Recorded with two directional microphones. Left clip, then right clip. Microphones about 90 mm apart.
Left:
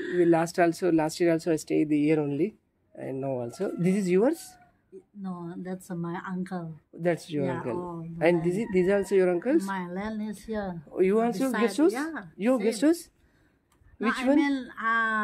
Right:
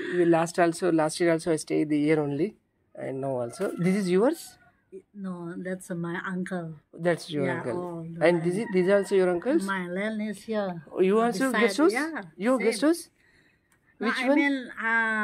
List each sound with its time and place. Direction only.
0.0 s speech: 25° left (ahead or behind)
5.2 s a woman's voice: 25° left (ahead or behind)
7.0 s speech: 35° left (ahead or behind)
8.2 s speech: 45° left (ahead or behind)
9.8 s speech: 20° left (ahead or behind)
10.4 s a woman's voice: 10° left (ahead or behind)
12.6 s a woman's voice: 55° left (ahead or behind)
13.9 s speech: 40° left (ahead or behind)